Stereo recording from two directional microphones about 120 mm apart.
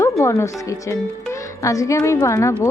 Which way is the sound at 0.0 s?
25° left (ahead or behind).